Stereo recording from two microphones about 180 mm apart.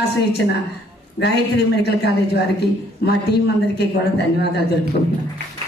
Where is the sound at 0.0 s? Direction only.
65° left (ahead or behind).